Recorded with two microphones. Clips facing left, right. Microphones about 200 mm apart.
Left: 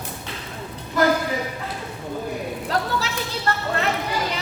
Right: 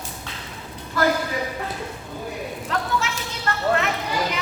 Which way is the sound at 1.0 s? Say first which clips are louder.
Left 2 dB; 20° left (ahead or behind).